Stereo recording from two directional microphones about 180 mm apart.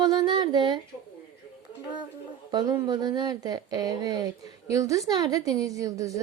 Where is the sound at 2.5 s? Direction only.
25° right (ahead or behind).